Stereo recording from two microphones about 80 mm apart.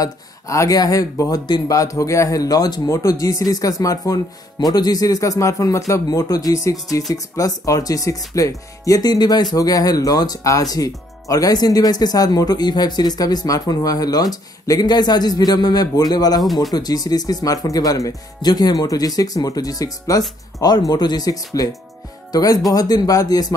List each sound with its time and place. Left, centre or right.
0.0 s speech: left
2.9 s speech: left